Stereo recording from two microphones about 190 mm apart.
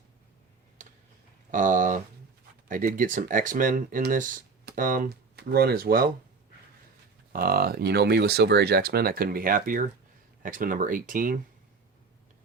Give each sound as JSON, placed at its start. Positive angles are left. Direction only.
{"t": 0.8, "sound": "tick", "side_deg": -40}
{"t": 1.5, "sound": "a sound", "side_deg": -45}
{"t": 2.6, "sound": "speech", "side_deg": -45}
{"t": 7.3, "sound": "speech", "side_deg": -50}